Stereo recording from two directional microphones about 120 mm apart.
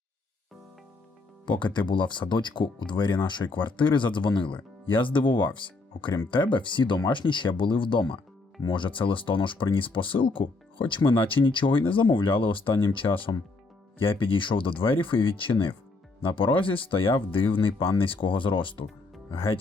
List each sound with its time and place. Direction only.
1.5 s speech: 40° left (ahead or behind)